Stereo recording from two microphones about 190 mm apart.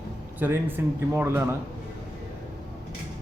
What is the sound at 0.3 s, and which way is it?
Speech, 10° right (ahead or behind).